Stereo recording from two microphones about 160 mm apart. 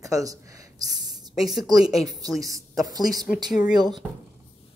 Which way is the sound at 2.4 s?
20° right (ahead or behind).